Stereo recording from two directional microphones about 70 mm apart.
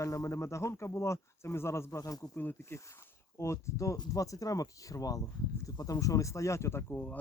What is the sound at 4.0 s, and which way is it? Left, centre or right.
Speech, left.